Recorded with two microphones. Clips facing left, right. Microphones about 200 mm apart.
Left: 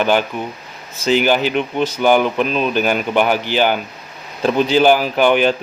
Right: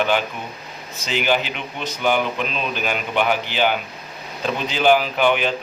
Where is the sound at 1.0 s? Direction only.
45° left (ahead or behind).